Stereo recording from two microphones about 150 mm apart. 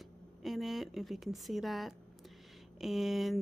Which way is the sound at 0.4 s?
Centre (ahead or behind).